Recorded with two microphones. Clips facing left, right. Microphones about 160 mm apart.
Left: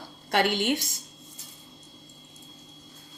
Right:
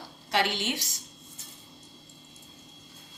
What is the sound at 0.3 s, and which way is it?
Speech, 55° left (ahead or behind).